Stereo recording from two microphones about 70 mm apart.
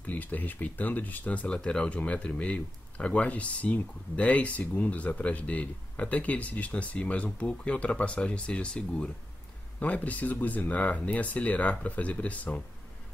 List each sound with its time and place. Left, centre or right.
0.0 s speech: left